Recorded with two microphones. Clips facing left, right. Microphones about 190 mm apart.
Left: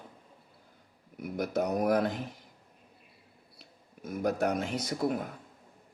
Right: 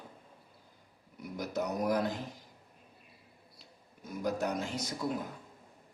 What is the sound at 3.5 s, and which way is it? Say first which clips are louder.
A man's voice: left 2 dB; 60° left (ahead or behind).